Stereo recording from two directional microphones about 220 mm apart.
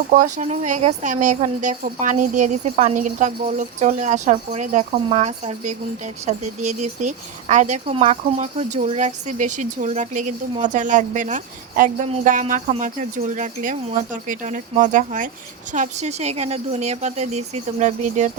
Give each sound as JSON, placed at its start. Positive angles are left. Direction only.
{"t": 0.1, "sound": "speech", "side_deg": -35}